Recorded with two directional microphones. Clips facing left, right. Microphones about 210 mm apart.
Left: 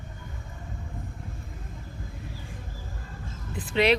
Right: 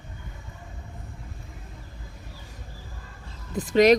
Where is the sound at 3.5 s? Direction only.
40° right (ahead or behind).